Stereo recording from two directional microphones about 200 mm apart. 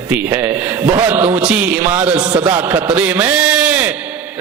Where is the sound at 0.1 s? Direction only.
10° right (ahead or behind).